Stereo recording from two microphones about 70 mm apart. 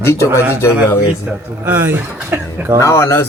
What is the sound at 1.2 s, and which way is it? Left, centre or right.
Speech, right.